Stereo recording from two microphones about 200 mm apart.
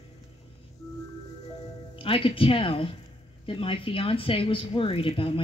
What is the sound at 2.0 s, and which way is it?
Speech, 25° left (ahead or behind).